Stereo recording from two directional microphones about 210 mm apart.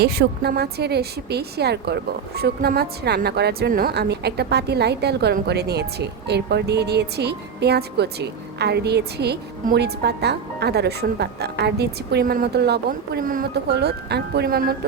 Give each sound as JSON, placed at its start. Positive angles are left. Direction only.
{"t": 0.0, "sound": "a woman's voice", "side_deg": -50}